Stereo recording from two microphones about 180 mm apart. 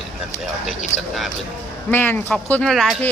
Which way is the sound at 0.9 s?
90° left.